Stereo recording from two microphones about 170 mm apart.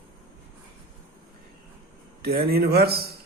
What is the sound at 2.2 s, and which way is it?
Speech, 65° right (ahead or behind).